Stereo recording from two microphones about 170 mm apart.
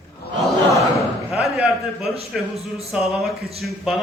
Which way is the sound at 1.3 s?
Centre (ahead or behind).